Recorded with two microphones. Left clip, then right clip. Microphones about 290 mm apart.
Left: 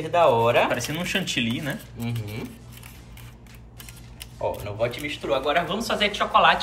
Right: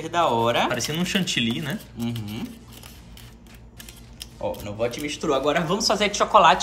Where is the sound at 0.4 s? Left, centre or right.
Centre.